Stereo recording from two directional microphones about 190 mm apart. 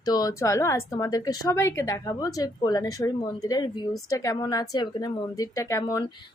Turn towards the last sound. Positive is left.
turn(degrees=15)  # may be behind; listen again after turning